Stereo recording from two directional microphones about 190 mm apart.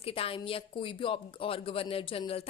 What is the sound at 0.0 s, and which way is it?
A woman's voice, 30° left (ahead or behind).